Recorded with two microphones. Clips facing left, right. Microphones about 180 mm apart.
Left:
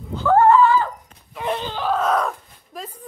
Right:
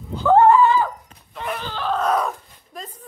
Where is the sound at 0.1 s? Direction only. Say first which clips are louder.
Right 1 dB; 15° right (ahead or behind).